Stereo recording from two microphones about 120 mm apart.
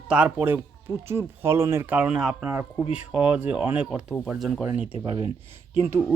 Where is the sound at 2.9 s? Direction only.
10° right (ahead or behind).